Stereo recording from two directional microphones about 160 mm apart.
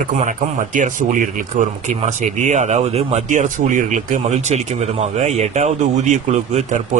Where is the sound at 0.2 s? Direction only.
55° right (ahead or behind).